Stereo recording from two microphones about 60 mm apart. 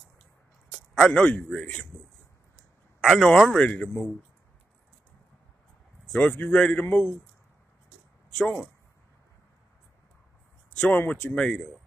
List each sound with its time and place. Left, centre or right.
1.0 s a man's voice: centre
3.0 s speech: centre
3.6 s a man's voice: left
6.1 s a man's voice: left
6.5 s a man's voice: centre
6.8 s a man's voice: left
10.8 s a man's voice: left
11.3 s a man's voice: centre